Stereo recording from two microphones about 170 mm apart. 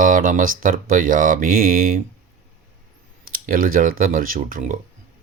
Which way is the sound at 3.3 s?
55° right (ahead or behind).